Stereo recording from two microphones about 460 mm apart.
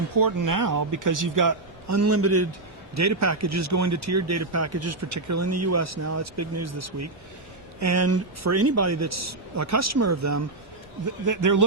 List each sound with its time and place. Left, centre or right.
0.1 s speech: right